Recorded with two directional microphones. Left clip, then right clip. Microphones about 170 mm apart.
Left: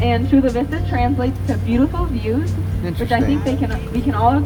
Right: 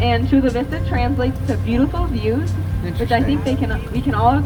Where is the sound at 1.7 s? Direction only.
90° right.